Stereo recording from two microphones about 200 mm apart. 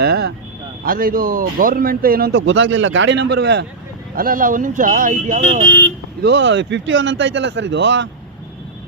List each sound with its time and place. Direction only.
0.0 s vehicle: 55° right (ahead or behind)
0.9 s speech: 45° right (ahead or behind)
2.3 s speech: 70° right (ahead or behind)
4.1 s speech: 45° right (ahead or behind)
6.2 s speech: 60° right (ahead or behind)